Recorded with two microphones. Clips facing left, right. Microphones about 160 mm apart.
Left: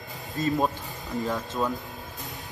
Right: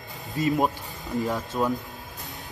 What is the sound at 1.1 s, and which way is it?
Speech, centre (ahead or behind).